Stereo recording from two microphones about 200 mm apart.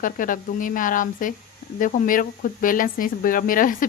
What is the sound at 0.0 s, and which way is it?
Speech, 40° left (ahead or behind).